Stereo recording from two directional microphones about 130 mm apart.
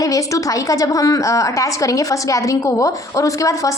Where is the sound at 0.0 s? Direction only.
25° left (ahead or behind).